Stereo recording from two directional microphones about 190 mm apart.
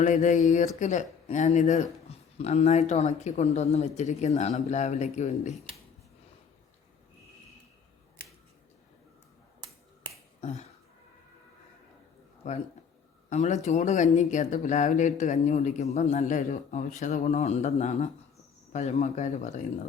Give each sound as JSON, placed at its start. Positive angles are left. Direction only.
{"t": 0.0, "sound": "speech", "side_deg": 40}
{"t": 10.4, "sound": "speech", "side_deg": 35}
{"t": 12.4, "sound": "speech", "side_deg": 40}